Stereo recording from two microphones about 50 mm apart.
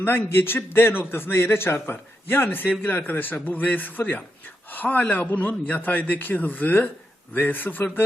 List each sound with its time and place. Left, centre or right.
0.0 s a man's voice: left